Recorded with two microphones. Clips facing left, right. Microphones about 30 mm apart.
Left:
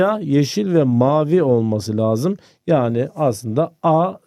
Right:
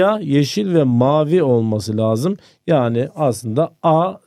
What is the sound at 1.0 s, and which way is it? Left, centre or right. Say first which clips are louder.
Speech: right 1 dB; right.